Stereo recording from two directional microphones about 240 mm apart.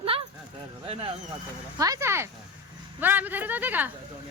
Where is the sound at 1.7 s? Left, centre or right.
Centre.